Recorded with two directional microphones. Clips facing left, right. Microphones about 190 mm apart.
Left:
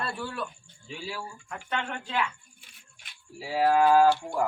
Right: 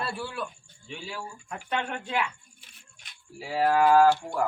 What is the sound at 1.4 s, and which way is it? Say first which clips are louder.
Speech: right 2 dB; 15° right (ahead or behind).